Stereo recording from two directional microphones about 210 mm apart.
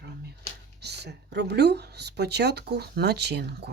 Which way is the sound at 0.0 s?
50° right (ahead or behind).